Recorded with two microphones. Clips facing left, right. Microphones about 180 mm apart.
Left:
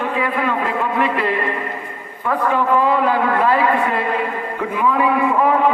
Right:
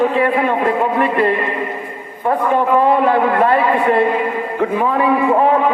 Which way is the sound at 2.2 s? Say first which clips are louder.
Right 3 dB; 45° right (ahead or behind).